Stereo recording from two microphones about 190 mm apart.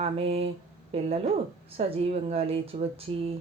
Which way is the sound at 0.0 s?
30° right (ahead or behind).